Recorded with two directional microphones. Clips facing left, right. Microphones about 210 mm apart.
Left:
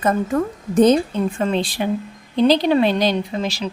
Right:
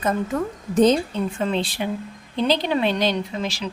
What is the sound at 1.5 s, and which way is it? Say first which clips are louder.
Speech: left 4 dB; 45° left (ahead or behind).